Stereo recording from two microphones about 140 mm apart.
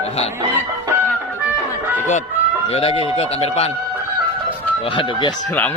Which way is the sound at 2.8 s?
45° left (ahead or behind).